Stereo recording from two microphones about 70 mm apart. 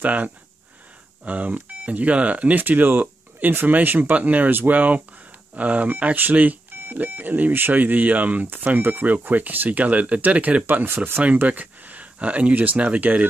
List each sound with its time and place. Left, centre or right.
0.0 s speech: right